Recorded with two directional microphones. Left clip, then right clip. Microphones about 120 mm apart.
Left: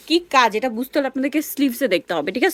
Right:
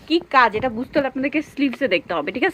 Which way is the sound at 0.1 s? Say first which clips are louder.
Even; 40° left (ahead or behind).